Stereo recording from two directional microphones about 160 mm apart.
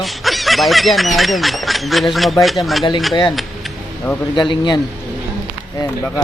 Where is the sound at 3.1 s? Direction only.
20° left (ahead or behind).